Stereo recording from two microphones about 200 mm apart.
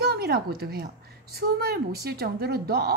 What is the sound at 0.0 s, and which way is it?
A child's voice, 50° right (ahead or behind).